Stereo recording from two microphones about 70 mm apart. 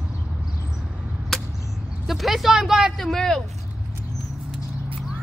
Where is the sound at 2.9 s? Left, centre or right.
Centre.